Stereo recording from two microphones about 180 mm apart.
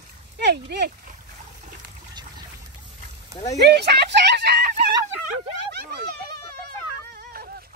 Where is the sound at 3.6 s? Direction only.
70° right (ahead or behind).